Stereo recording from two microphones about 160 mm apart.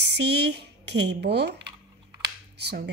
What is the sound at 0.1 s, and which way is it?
Speech, 90° right.